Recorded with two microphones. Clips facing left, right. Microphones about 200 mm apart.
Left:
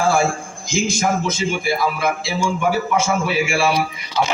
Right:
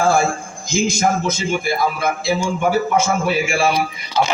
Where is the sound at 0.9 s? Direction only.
45° right (ahead or behind).